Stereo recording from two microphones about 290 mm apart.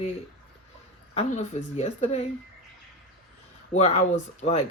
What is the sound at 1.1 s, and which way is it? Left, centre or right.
Speech, left.